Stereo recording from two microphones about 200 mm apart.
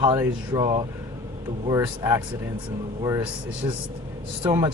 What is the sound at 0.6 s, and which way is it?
Speech, 30° right (ahead or behind).